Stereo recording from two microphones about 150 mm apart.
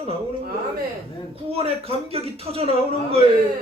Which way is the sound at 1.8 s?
40° right (ahead or behind).